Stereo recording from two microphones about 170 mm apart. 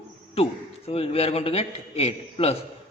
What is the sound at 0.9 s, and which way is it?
A man's voice, 35° left (ahead or behind).